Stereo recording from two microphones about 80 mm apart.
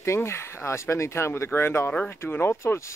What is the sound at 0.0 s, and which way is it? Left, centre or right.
Speech, left.